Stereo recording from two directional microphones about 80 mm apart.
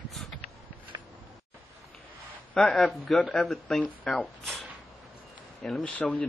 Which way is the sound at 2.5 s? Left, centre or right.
Centre.